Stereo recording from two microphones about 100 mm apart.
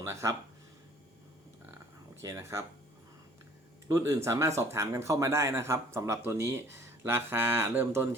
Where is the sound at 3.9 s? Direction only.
30° right (ahead or behind).